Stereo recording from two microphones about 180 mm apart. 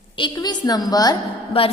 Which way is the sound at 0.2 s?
20° left (ahead or behind).